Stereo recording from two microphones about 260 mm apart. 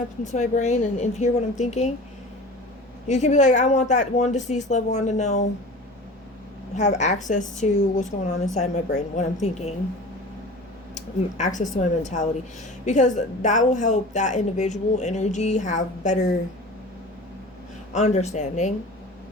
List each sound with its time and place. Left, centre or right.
0.3 s a woman's voice: left
3.1 s a woman's voice: left
6.7 s a woman's voice: left
10.9 s a woman's voice: left
17.9 s a woman's voice: left